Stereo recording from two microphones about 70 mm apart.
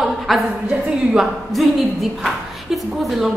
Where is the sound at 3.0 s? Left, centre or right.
Centre.